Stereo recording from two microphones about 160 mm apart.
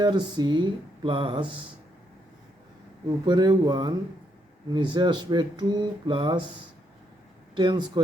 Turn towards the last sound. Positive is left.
turn(degrees=-30)  # may be behind; listen again after turning